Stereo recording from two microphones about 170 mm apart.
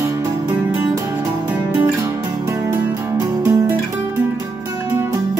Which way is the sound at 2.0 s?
15° right (ahead or behind).